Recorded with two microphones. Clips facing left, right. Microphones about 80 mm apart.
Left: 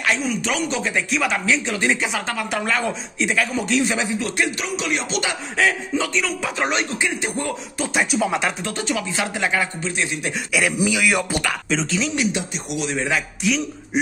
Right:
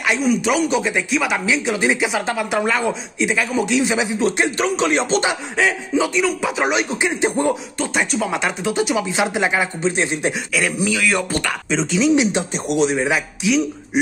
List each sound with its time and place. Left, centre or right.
0.0 s speech: centre
4.2 s speech: right
4.6 s music: right
5.6 s speech: centre
6.9 s speech: right
7.7 s speech: centre
10.5 s speech: centre
12.2 s speech: right
12.5 s music: right
12.8 s speech: centre
13.4 s a man's voice: centre